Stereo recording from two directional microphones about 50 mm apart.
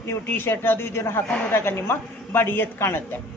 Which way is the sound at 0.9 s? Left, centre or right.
Left.